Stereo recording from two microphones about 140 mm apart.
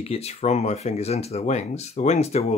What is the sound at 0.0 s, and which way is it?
Speech, 45° left (ahead or behind).